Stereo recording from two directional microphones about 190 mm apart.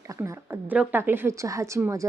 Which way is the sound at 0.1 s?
15° right (ahead or behind).